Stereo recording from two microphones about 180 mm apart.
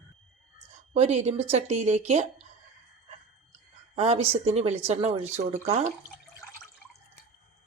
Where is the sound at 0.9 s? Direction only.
35° right (ahead or behind).